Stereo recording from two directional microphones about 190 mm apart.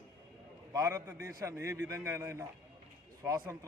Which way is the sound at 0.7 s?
15° right (ahead or behind).